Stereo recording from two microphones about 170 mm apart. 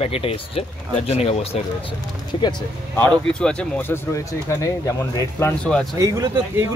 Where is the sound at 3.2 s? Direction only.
5° left (ahead or behind).